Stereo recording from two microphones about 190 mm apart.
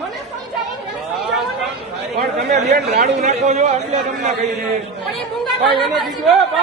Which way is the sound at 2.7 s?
55° right (ahead or behind).